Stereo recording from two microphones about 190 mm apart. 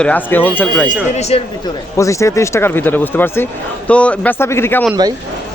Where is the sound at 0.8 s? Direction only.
35° left (ahead or behind).